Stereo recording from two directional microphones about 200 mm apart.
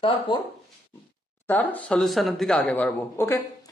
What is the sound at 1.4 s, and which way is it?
Speech, 10° left (ahead or behind).